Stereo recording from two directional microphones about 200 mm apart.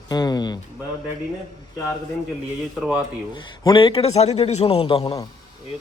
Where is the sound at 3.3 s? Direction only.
25° left (ahead or behind).